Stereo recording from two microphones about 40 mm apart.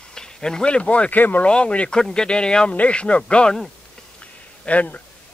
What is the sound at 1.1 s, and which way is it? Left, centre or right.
Speech, left.